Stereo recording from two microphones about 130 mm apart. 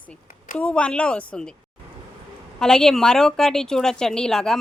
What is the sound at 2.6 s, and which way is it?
A woman's voice, 5° left (ahead or behind).